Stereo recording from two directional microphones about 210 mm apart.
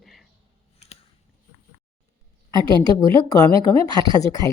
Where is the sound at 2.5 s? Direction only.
20° left (ahead or behind).